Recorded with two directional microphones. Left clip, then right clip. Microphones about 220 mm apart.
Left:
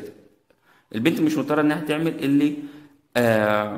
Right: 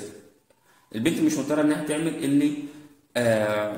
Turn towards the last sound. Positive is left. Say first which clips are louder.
# left 3 dB
turn(degrees=30)  # may be behind; listen again after turning